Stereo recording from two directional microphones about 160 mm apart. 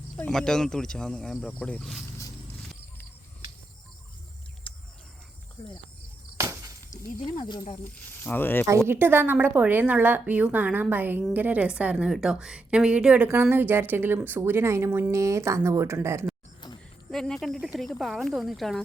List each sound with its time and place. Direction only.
0.2 s speech: 5° left (ahead or behind)
6.3 s a sound: 20° right (ahead or behind)
6.9 s speech: 30° left (ahead or behind)
7.9 s speech: 10° left (ahead or behind)
8.9 s a woman's voice: 15° right (ahead or behind)
17.1 s speech: 5° left (ahead or behind)